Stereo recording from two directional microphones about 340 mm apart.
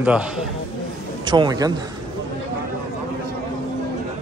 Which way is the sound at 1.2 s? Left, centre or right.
Centre.